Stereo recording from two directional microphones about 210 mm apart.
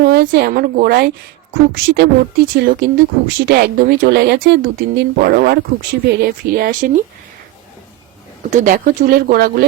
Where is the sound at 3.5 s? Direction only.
45° right (ahead or behind).